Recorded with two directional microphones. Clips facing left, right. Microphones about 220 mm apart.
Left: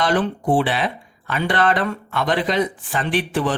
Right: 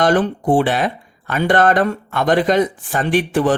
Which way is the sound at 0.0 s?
45° right (ahead or behind).